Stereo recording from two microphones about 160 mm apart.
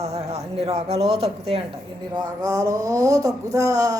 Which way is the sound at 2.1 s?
25° right (ahead or behind).